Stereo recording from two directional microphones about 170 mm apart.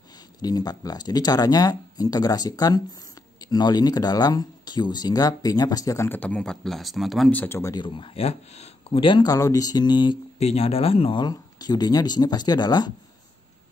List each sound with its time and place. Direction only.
0.4 s speech: 20° left (ahead or behind)
7.7 s speech: 30° left (ahead or behind)